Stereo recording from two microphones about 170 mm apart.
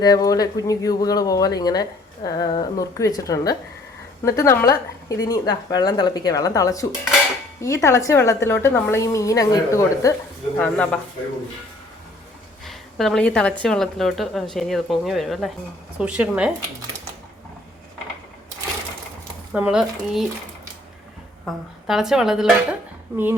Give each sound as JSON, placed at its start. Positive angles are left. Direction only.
{"t": 0.0, "sound": "a woman's voice", "side_deg": 20}
{"t": 10.6, "sound": "a woman's voice", "side_deg": 5}
{"t": 12.6, "sound": "speech", "side_deg": 0}
{"t": 19.5, "sound": "speech", "side_deg": -5}
{"t": 21.4, "sound": "speech", "side_deg": 0}